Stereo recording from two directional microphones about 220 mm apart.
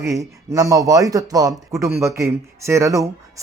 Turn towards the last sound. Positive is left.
turn(degrees=-15)  # may be behind; listen again after turning